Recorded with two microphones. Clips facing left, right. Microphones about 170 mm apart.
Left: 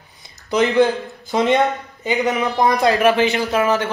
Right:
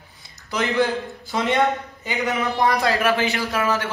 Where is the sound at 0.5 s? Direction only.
20° left (ahead or behind).